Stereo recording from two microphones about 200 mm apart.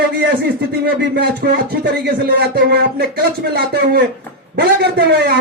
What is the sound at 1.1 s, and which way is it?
Speech, 50° right (ahead or behind).